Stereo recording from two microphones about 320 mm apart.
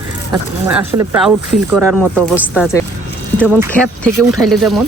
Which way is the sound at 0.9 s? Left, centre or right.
Centre.